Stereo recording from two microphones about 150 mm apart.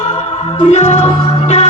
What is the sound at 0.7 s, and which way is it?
Music, 50° left (ahead or behind).